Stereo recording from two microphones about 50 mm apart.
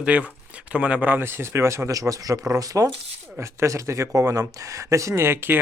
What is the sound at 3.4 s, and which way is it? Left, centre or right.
Speech, right.